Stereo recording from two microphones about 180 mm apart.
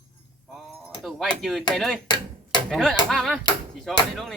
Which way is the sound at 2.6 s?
5° left (ahead or behind).